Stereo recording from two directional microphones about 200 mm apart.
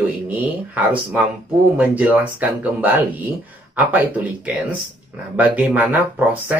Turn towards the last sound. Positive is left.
turn(degrees=-10)  # may be behind; listen again after turning